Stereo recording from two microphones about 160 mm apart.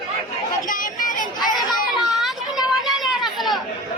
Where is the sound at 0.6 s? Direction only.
60° left (ahead or behind).